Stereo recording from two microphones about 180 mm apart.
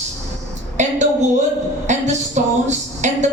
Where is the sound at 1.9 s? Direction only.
40° right (ahead or behind).